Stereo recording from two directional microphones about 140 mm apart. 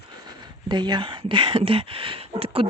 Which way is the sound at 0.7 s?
30° right (ahead or behind).